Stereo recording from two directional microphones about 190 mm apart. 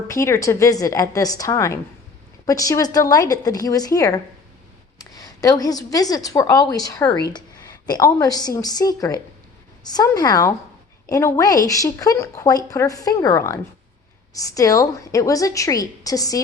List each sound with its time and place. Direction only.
0.1 s a woman's voice: 15° left (ahead or behind)